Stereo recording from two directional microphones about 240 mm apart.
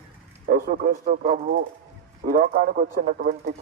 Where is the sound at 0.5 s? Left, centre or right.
Right.